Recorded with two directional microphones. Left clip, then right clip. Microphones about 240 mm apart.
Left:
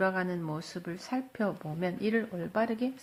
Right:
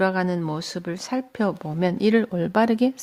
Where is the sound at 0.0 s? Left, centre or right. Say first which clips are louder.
Right 8 dB; right.